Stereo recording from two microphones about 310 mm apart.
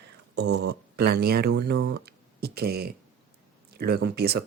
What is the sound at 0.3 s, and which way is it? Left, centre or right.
Speech, right.